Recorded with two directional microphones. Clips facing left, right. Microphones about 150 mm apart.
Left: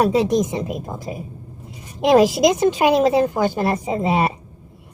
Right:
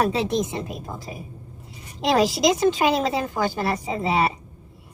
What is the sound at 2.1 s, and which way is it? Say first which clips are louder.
A woman's voice: left 5 dB; 20° left (ahead or behind).